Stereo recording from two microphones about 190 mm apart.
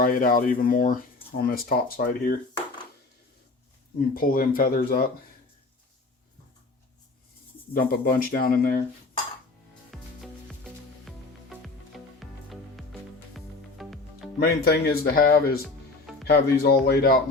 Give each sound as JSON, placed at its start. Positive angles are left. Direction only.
{"t": 0.0, "sound": "speech", "side_deg": 45}
{"t": 4.1, "sound": "speech", "side_deg": 50}
{"t": 7.7, "sound": "speech", "side_deg": 50}
{"t": 9.9, "sound": "music", "side_deg": 0}
{"t": 14.3, "sound": "speech", "side_deg": 55}